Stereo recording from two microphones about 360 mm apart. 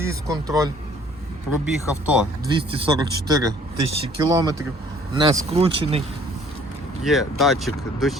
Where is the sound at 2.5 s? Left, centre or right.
Centre.